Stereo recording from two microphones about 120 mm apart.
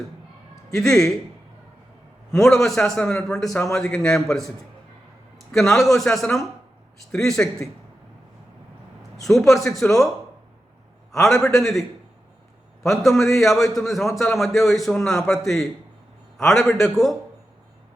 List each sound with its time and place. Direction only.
0.7 s a man's voice: 5° left (ahead or behind)
2.3 s a man's voice: centre (ahead or behind)
9.2 s a man's voice: centre (ahead or behind)
11.2 s a man's voice: 5° left (ahead or behind)
12.9 s a man's voice: centre (ahead or behind)